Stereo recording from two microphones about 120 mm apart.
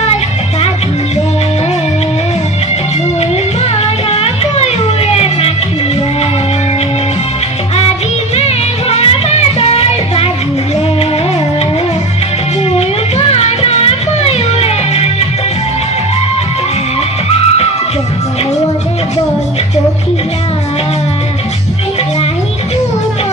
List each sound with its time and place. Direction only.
3.2 s music: 60° left (ahead or behind)
8.4 s music: 60° left (ahead or behind)
12.7 s music: 60° left (ahead or behind)